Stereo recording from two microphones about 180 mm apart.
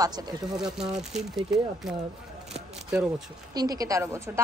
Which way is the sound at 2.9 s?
5° right (ahead or behind).